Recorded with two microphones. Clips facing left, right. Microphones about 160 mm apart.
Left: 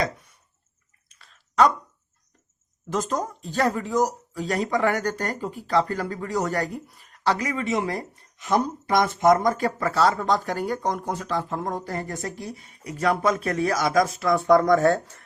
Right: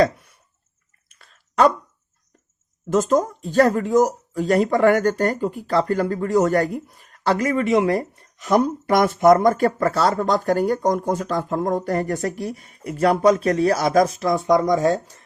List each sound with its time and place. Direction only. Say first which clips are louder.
1.0 s chewing: right 2 dB; 45° right (ahead or behind)
2.9 s speech: right 8 dB; 45° right (ahead or behind)
12.9 s speech: right 6 dB; 35° right (ahead or behind)
14.3 s speech: even; 15° right (ahead or behind)